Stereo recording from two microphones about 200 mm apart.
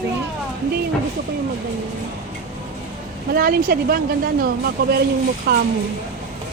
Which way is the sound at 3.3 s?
50° right (ahead or behind).